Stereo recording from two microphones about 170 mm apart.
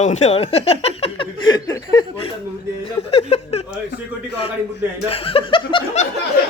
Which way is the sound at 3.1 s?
35° left (ahead or behind).